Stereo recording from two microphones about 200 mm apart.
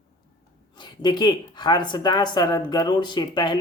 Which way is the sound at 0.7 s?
20° left (ahead or behind).